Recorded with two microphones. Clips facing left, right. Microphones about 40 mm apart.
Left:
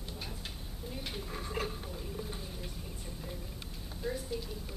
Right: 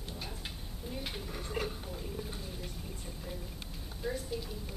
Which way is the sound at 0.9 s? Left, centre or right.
Centre.